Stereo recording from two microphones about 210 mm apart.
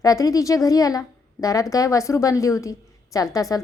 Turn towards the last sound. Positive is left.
turn(degrees=15)  # may be behind; listen again after turning